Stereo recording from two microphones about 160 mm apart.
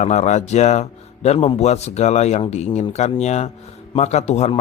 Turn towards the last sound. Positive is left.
turn(degrees=45)  # may be behind; listen again after turning